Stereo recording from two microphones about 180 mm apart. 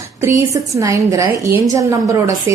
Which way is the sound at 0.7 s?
15° right (ahead or behind).